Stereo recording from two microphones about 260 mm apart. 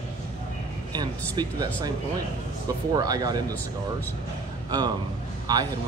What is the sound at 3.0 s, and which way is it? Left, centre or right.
Speech, centre.